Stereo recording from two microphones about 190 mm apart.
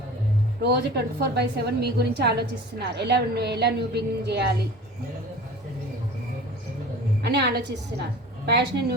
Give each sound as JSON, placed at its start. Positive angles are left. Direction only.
{"t": 0.6, "sound": "a woman's voice", "side_deg": -60}
{"t": 7.2, "sound": "a woman's voice", "side_deg": -60}